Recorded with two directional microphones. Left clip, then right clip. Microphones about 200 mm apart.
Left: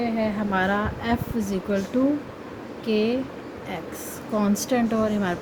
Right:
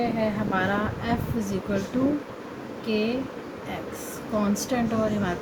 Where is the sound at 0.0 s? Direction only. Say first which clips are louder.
Even; 40° left (ahead or behind).